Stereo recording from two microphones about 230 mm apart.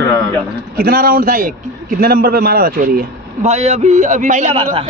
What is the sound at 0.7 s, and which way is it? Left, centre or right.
A man's voice, right.